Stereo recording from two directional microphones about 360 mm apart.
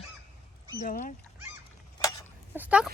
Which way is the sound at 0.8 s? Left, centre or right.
Left.